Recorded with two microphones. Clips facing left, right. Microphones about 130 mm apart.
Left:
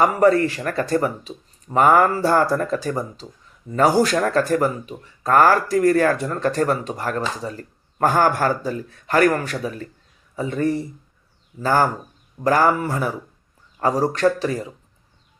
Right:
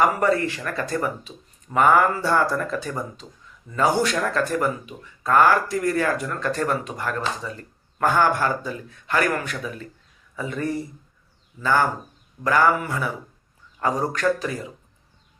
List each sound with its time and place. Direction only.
0.2 s speech: 40° left (ahead or behind)
3.2 s speech: 25° left (ahead or behind)
3.7 s speech: 40° left (ahead or behind)
11.6 s speech: 40° left (ahead or behind)